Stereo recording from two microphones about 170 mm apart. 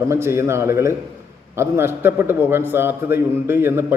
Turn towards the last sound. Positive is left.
turn(degrees=-15)  # may be behind; listen again after turning